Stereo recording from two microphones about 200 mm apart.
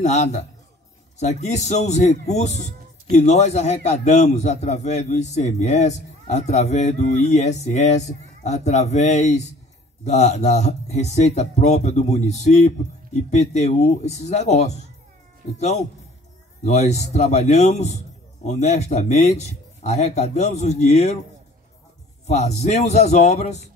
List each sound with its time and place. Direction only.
0.0 s a man's voice: 35° left (ahead or behind)
16.6 s a man's voice: 35° left (ahead or behind)
22.2 s a man's voice: 35° left (ahead or behind)